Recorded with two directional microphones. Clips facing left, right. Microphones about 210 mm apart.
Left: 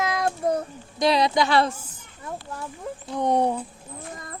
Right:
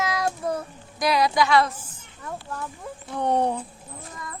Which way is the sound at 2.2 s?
25° left (ahead or behind).